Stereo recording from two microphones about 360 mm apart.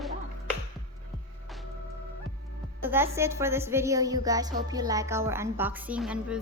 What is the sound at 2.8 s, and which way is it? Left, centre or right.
A woman's voice, centre.